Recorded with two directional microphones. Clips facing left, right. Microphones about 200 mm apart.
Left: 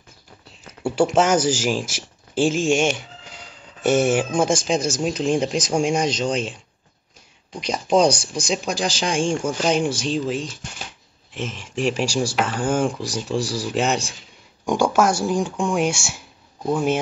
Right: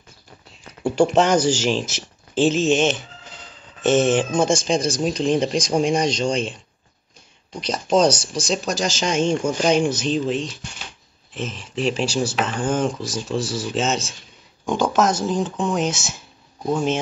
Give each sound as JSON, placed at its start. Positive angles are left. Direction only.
{"t": 0.8, "sound": "speech", "side_deg": 5}